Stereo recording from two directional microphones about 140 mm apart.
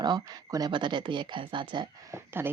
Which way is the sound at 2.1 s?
15° right (ahead or behind).